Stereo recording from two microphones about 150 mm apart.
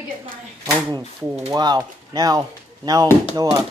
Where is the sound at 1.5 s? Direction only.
25° right (ahead or behind).